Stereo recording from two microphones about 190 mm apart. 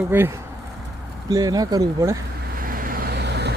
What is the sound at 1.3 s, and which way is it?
Speech, 20° right (ahead or behind).